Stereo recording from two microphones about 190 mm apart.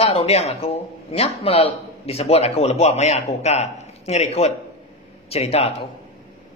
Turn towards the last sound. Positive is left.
turn(degrees=30)  # may be behind; listen again after turning